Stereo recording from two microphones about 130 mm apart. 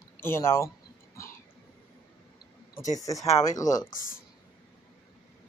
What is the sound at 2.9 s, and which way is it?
Speech, 25° left (ahead or behind).